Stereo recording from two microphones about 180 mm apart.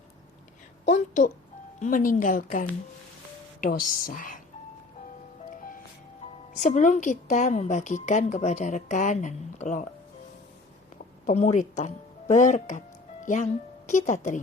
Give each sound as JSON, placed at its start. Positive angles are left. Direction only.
{"t": 0.9, "sound": "a woman's voice", "side_deg": 45}
{"t": 6.6, "sound": "a woman's voice", "side_deg": 45}
{"t": 11.3, "sound": "a woman's voice", "side_deg": 40}